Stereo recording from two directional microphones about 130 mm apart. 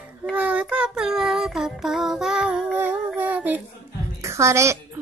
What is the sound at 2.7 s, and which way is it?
Humming, 15° right (ahead or behind).